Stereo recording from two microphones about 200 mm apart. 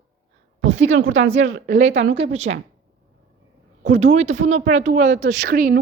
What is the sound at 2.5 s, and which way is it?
Speech, 55° right (ahead or behind).